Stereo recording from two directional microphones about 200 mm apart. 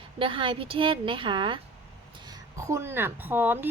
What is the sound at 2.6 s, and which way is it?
A woman's voice, 15° right (ahead or behind).